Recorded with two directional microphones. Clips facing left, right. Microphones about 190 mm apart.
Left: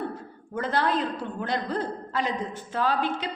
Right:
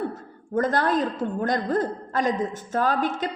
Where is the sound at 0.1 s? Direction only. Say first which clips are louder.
Right 6 dB; 45° right (ahead or behind).